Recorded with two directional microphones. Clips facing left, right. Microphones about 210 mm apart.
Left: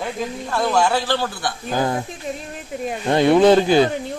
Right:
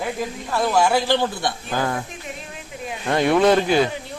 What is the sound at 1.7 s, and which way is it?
Speech, 20° left (ahead or behind).